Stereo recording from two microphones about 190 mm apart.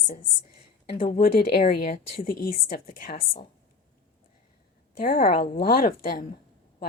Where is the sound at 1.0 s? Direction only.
50° left (ahead or behind).